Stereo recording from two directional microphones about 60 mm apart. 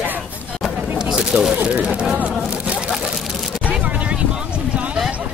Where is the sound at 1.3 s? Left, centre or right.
Right.